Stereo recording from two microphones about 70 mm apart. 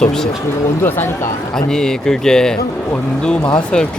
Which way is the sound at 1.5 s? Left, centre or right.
Centre.